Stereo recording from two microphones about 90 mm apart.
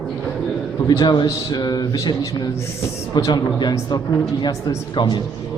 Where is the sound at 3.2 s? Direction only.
40° left (ahead or behind).